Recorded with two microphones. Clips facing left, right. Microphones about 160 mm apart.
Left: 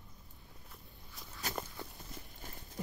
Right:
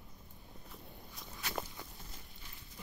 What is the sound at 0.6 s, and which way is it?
Walk, centre (ahead or behind).